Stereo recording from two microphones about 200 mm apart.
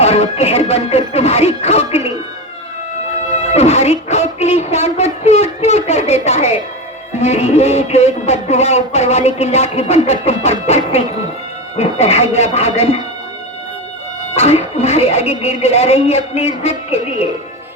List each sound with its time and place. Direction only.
0.0 s music: 30° left (ahead or behind)
3.5 s music: 30° left (ahead or behind)
7.2 s speech: 30° left (ahead or behind)
14.3 s speech: 30° left (ahead or behind)